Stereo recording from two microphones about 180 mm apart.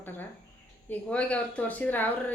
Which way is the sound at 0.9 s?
5° left (ahead or behind).